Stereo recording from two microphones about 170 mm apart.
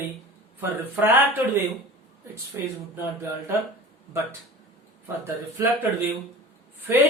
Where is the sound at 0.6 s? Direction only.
10° right (ahead or behind).